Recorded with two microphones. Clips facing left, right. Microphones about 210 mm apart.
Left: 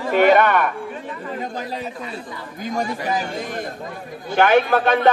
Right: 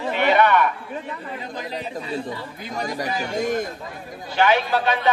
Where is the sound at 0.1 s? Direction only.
45° left (ahead or behind).